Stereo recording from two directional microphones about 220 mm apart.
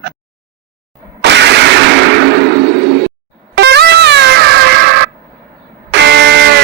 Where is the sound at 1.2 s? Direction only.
50° right (ahead or behind).